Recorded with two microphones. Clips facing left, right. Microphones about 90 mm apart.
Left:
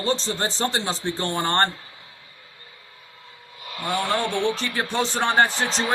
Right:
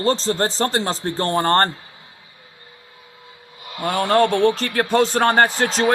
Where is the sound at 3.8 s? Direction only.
40° right (ahead or behind).